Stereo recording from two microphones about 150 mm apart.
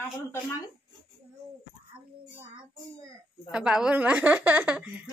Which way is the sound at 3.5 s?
5° right (ahead or behind).